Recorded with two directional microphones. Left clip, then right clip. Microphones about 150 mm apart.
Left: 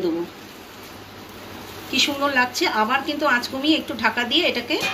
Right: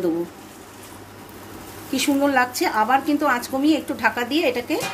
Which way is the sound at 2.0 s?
90° right.